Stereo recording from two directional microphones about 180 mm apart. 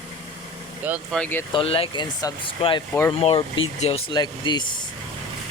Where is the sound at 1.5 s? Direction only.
30° left (ahead or behind).